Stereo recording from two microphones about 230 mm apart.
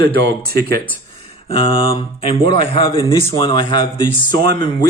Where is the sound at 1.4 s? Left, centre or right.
Left.